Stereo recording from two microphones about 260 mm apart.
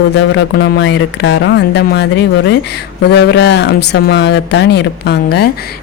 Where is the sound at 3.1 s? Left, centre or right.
Left.